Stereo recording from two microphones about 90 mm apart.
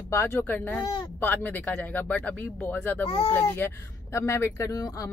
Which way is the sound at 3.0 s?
90° left.